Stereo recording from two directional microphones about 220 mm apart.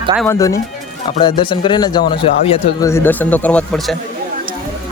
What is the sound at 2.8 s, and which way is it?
Speech, 10° left (ahead or behind).